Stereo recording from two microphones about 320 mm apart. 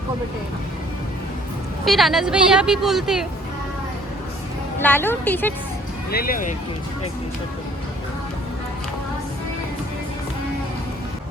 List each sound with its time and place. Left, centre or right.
1.8 s speech: centre
4.8 s speech: centre
6.1 s speech: left